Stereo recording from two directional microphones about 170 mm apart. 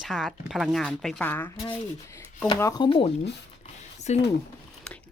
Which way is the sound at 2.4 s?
25° left (ahead or behind).